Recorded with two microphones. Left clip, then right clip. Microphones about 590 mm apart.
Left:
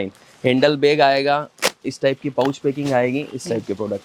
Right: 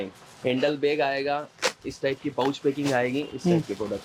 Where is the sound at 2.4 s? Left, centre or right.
Left.